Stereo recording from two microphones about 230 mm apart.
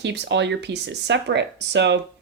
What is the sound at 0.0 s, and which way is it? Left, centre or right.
A woman's voice, right.